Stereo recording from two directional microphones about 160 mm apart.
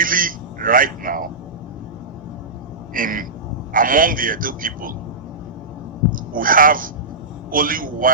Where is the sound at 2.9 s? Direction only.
60° right (ahead or behind).